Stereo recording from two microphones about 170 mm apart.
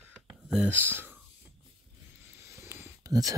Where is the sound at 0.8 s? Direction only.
10° right (ahead or behind).